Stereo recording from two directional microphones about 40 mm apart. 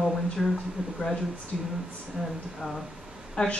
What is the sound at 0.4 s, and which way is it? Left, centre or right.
Speech, centre.